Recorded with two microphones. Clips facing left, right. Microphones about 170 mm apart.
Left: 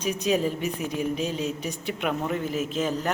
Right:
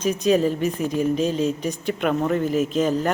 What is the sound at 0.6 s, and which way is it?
A woman's voice, 45° right (ahead or behind).